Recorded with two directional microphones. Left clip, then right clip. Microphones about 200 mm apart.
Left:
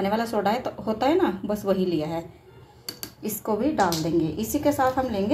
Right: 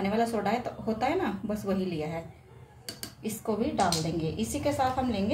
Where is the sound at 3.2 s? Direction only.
30° left (ahead or behind).